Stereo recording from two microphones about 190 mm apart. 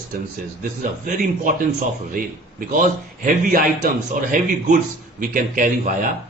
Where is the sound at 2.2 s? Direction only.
45° right (ahead or behind).